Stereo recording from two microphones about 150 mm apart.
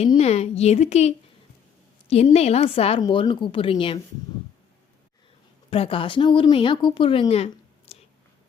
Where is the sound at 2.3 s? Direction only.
45° left (ahead or behind).